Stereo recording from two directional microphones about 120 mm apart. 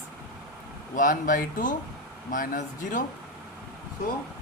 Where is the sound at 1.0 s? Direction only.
90° left.